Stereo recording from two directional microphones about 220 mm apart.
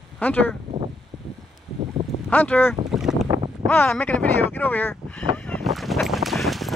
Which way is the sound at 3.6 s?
10° left (ahead or behind).